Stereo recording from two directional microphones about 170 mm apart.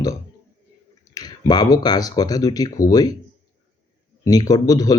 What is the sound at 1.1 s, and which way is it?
Speech, 25° left (ahead or behind).